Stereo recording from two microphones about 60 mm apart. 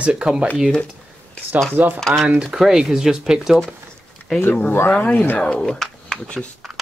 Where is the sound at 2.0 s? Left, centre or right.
Centre.